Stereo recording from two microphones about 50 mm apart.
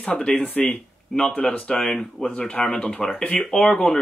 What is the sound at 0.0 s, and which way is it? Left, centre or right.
Speech, left.